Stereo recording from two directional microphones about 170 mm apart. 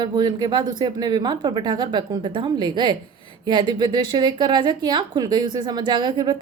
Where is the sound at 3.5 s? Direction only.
25° right (ahead or behind).